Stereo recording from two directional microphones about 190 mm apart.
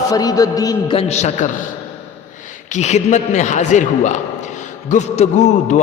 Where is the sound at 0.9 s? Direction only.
35° left (ahead or behind).